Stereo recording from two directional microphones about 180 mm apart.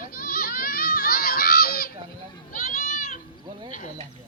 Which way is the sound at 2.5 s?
50° left (ahead or behind).